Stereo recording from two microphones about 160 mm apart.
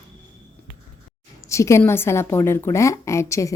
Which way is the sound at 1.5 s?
20° left (ahead or behind).